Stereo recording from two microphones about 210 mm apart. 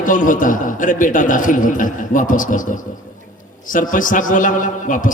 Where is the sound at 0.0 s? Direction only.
40° left (ahead or behind).